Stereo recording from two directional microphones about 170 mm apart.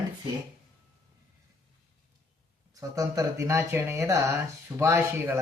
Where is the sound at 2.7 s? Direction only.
20° right (ahead or behind).